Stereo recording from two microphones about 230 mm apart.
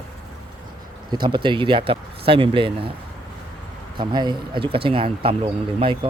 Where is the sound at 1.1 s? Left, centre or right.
Centre.